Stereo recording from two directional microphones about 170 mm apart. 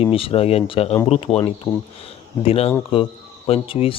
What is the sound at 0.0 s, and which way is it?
Speech, 35° left (ahead or behind).